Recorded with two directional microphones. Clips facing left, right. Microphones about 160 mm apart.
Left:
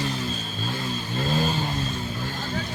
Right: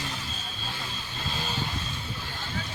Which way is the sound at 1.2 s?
45° left (ahead or behind).